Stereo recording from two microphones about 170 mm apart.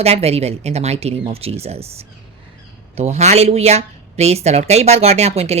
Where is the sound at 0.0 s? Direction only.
35° right (ahead or behind).